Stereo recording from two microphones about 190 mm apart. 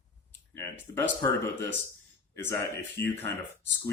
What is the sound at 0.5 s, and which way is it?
Speech, 15° left (ahead or behind).